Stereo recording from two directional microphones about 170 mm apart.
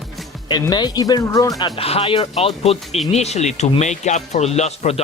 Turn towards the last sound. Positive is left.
turn(degrees=40)  # may be behind; listen again after turning